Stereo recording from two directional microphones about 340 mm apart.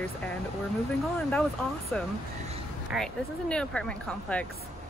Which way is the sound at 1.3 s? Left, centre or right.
Centre.